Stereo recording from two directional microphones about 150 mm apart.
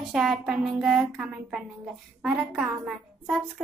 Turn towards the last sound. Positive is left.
turn(degrees=-5)  # may be behind; listen again after turning